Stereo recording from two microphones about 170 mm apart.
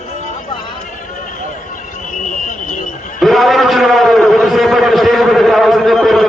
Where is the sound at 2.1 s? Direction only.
50° left (ahead or behind).